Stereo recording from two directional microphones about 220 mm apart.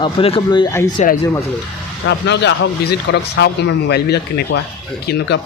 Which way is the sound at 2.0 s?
50° left (ahead or behind).